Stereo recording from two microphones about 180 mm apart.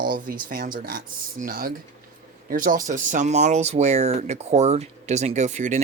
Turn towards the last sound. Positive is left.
turn(degrees=-40)  # may be behind; listen again after turning